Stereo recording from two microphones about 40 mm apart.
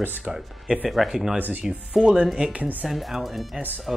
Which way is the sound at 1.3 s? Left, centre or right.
Right.